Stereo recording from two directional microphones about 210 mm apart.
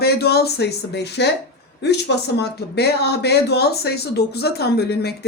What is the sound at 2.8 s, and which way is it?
Speech, 50° left (ahead or behind).